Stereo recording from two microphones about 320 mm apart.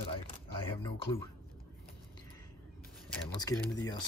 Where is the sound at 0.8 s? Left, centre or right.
Centre.